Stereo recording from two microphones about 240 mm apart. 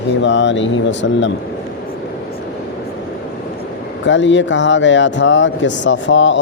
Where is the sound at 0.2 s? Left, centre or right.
Left.